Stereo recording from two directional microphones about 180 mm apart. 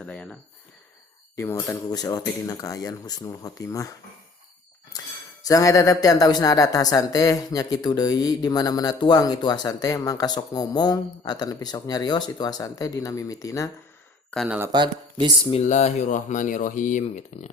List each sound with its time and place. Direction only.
0.0 s a sound: 5° left (ahead or behind)
1.4 s speech: 15° left (ahead or behind)
5.4 s speech: 20° left (ahead or behind)
14.3 s speech: centre (ahead or behind)
14.7 s speech: 25° right (ahead or behind)
15.4 s speech: 35° left (ahead or behind)